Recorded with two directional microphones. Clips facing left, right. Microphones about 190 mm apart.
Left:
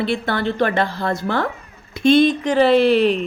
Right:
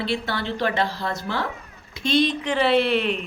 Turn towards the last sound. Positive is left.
turn(degrees=35)  # may be behind; listen again after turning